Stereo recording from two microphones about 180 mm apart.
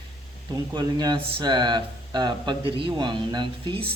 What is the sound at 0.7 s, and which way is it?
A man's voice, 25° right (ahead or behind).